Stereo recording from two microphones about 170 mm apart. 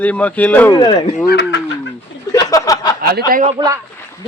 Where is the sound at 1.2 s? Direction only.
85° left.